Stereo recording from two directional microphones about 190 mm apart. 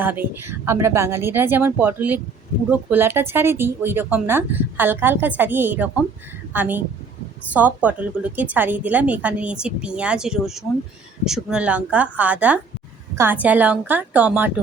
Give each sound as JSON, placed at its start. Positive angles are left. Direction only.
{"t": 0.0, "sound": "speech", "side_deg": -10}